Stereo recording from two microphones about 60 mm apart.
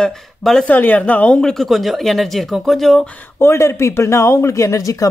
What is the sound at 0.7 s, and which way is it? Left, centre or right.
Speech, left.